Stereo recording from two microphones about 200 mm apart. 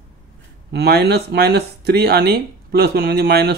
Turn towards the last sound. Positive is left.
turn(degrees=-50)  # may be behind; listen again after turning